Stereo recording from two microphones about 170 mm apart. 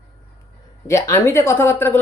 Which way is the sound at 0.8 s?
15° left (ahead or behind).